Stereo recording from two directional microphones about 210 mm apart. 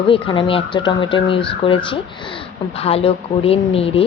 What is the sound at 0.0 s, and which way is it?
A woman's voice, 25° left (ahead or behind).